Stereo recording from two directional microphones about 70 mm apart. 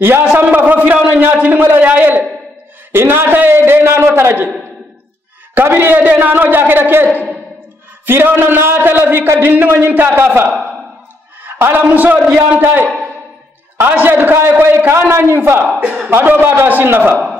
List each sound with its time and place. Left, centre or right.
0.0 s a man's voice: right
5.5 s a man's voice: right
11.5 s a sound: right
11.9 s a man's voice: right
15.8 s a man's voice: right